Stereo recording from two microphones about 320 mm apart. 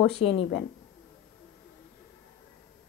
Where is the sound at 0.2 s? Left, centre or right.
Left.